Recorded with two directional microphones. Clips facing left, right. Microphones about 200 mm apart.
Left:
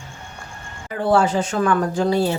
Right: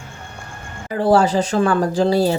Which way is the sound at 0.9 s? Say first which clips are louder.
Right 3 dB; 35° right (ahead or behind).